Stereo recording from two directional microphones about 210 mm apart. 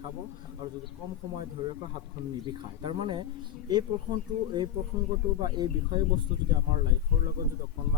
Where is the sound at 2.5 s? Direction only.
25° right (ahead or behind).